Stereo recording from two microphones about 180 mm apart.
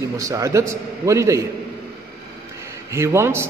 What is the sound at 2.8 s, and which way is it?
Speech, 15° right (ahead or behind).